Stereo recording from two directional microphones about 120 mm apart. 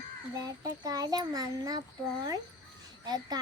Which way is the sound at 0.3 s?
30° right (ahead or behind).